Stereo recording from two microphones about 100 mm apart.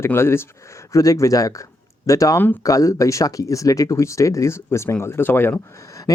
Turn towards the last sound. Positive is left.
turn(degrees=35)  # may be behind; listen again after turning